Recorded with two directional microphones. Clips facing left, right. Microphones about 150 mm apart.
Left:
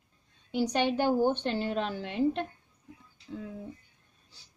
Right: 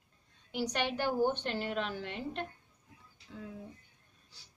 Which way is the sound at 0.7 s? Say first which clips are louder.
Left 7 dB; 30° left (ahead or behind).